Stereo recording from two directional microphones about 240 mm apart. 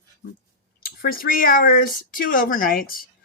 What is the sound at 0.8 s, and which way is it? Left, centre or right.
Speech, left.